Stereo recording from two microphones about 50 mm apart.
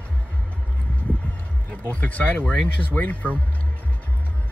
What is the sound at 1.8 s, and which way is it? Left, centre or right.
Speech, left.